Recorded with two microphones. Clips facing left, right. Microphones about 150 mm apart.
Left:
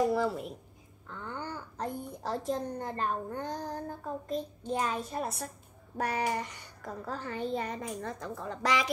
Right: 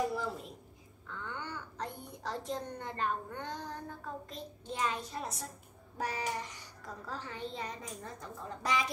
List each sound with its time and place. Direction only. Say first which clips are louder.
1.1 s a child's voice: left 3 dB; 40° left (ahead or behind); by 8.9 s 90° left